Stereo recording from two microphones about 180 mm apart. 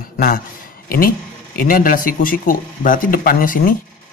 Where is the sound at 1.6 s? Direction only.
50° left (ahead or behind).